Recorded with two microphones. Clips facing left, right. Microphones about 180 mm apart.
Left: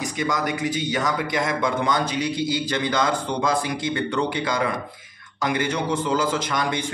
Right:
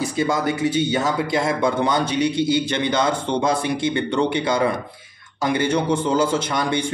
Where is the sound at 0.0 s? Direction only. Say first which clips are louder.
Right 4 dB; 30° right (ahead or behind).